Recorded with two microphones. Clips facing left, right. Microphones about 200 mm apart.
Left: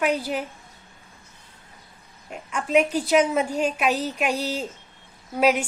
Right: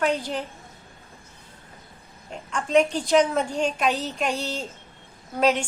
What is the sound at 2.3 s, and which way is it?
A woman's voice, 5° left (ahead or behind).